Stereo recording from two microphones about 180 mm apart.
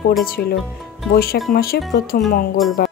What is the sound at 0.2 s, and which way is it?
Speech, 60° left (ahead or behind).